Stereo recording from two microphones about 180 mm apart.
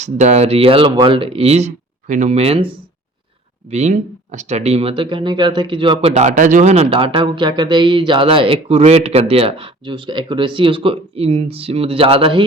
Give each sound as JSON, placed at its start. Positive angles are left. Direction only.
{"t": 0.0, "sound": "speech", "side_deg": -40}
{"t": 3.7, "sound": "speech", "side_deg": -40}